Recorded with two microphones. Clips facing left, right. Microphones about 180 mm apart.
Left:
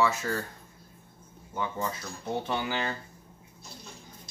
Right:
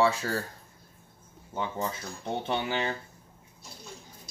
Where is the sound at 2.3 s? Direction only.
25° right (ahead or behind).